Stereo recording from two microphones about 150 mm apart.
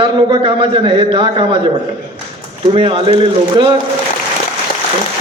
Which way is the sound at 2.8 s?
35° right (ahead or behind).